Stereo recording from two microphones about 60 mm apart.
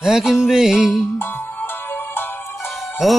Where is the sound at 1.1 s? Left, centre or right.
Left.